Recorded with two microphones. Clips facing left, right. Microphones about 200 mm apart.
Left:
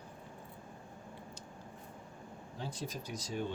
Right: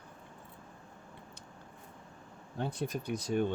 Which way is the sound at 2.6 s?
60° right (ahead or behind).